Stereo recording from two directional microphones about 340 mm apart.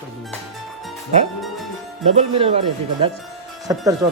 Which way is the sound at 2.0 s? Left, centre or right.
Centre.